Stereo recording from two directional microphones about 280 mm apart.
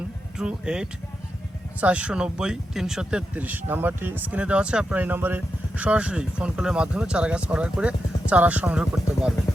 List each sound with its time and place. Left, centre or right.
0.3 s speech: centre